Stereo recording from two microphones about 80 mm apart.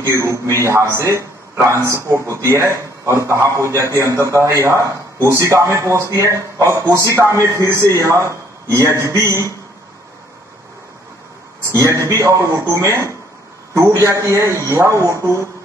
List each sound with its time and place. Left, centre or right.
0.0 s a man's voice: right
11.6 s a man's voice: right